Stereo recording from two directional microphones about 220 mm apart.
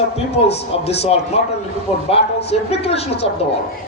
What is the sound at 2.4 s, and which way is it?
Speech, 30° left (ahead or behind).